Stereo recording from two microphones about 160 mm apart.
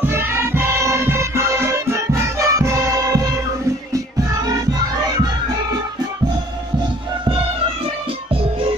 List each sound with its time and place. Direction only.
0.1 s music: 15° right (ahead or behind)